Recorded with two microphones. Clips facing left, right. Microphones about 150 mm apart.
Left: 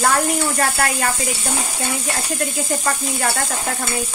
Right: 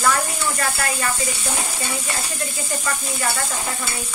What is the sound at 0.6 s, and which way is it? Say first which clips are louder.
Speech: left 4 dB; 60° left (ahead or behind).